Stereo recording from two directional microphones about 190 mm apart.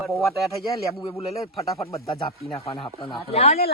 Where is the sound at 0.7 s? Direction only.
15° left (ahead or behind); by 3.6 s 35° left (ahead or behind).